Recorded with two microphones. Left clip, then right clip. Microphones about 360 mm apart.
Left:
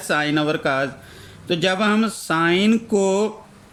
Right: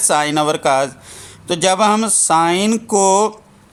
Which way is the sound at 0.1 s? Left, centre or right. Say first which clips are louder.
Right 4 dB; centre.